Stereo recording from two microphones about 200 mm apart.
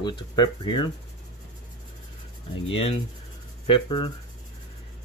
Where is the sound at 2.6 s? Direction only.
25° left (ahead or behind).